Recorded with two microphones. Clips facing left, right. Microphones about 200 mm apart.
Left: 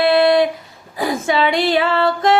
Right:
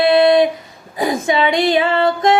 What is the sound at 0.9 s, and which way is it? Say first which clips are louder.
Speech: right 1 dB; 20° right (ahead or behind).